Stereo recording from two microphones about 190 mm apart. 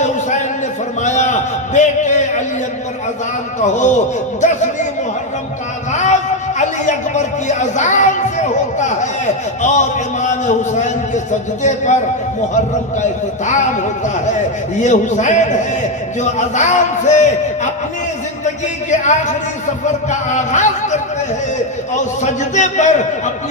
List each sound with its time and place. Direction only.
1.0 s a sound: 40° left (ahead or behind)
3.6 s speech: 40° left (ahead or behind)
5.9 s speech: 40° left (ahead or behind)
14.8 s speech: 40° left (ahead or behind)
19.8 s speech: 40° left (ahead or behind)